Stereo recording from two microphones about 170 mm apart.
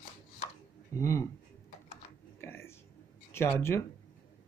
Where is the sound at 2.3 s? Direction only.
15° left (ahead or behind).